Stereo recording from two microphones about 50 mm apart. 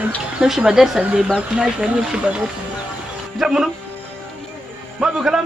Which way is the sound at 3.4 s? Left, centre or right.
Centre.